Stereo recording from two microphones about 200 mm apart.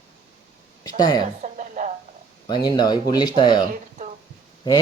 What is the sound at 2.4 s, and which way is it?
Speech, 20° left (ahead or behind).